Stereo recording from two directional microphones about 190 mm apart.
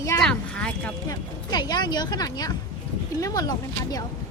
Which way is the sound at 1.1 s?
20° left (ahead or behind).